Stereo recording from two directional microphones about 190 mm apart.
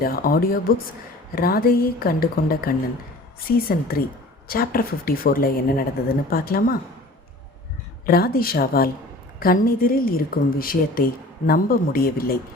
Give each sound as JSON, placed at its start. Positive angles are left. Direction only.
{"t": 0.0, "sound": "a woman's voice", "side_deg": 50}
{"t": 8.0, "sound": "a woman's voice", "side_deg": 50}